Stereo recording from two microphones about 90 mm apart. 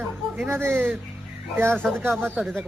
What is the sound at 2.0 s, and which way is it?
Speech, 20° right (ahead or behind).